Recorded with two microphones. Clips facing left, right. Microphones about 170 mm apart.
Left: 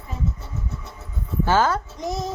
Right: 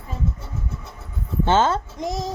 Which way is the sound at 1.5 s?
25° right (ahead or behind).